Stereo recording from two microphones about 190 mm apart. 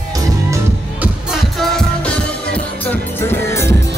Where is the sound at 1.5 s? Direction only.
5° left (ahead or behind).